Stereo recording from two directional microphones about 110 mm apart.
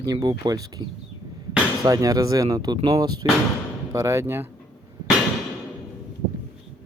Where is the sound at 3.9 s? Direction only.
25° right (ahead or behind).